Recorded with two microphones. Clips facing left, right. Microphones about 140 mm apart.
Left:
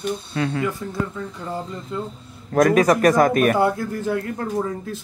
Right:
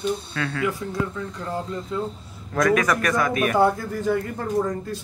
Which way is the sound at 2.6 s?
30° left (ahead or behind).